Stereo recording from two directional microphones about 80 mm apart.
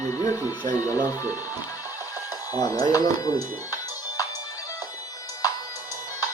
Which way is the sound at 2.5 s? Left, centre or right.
Left.